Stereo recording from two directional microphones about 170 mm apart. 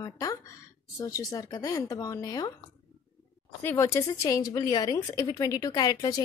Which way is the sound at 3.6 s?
15° left (ahead or behind).